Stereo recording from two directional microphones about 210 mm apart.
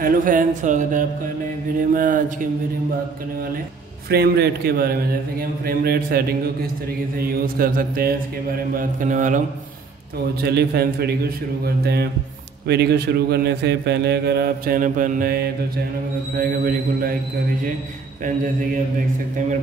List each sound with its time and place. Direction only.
0.0 s speech: 40° right (ahead or behind)
4.1 s speech: 50° right (ahead or behind)
10.4 s speech: 50° right (ahead or behind)